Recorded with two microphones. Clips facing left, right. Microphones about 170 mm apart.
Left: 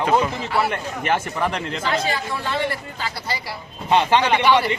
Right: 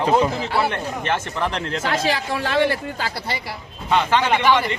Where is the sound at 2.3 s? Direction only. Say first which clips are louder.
Right 5 dB; 90° right.